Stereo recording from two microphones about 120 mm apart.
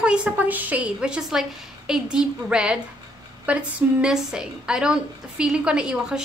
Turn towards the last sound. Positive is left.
turn(degrees=-5)  # may be behind; listen again after turning